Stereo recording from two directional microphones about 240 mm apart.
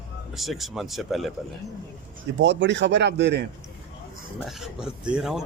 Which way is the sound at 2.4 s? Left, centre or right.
Right.